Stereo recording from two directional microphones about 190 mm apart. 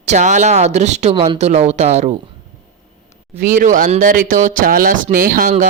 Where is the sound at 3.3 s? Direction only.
45° right (ahead or behind).